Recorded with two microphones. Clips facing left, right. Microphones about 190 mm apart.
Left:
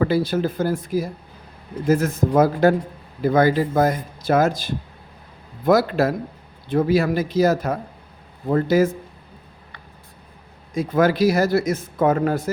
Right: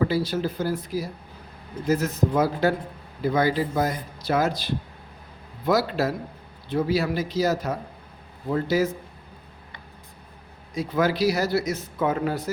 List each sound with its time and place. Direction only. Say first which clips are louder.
0.0 s speech: left 4 dB; 55° left (ahead or behind)
10.8 s speech: left 5 dB; 50° left (ahead or behind)